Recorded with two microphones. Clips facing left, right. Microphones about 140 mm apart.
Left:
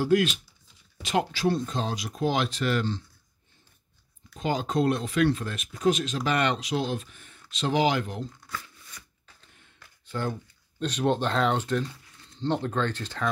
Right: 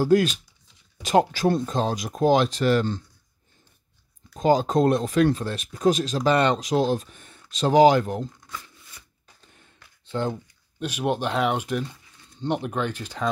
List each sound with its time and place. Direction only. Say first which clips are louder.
0.0 s speech: right 4 dB; 40° right (ahead or behind)
4.4 s speech: right 7 dB; 40° right (ahead or behind)
10.0 s speech: right 4 dB; 25° right (ahead or behind)
10.8 s speech: even; 10° right (ahead or behind)